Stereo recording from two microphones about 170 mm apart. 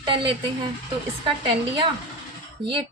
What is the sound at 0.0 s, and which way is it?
A woman's voice, 30° right (ahead or behind).